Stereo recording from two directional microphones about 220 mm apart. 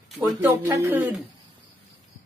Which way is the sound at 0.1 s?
10° right (ahead or behind).